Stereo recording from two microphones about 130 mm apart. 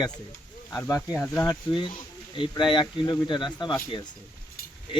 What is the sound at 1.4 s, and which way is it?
Speech, 35° left (ahead or behind).